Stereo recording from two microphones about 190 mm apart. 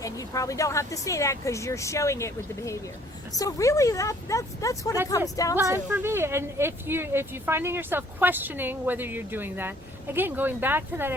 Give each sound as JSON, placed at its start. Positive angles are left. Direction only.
{"t": 0.0, "sound": "speech", "side_deg": 15}
{"t": 5.5, "sound": "speech", "side_deg": -15}